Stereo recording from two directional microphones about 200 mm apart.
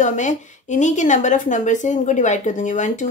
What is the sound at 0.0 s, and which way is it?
A woman's voice, 35° left (ahead or behind).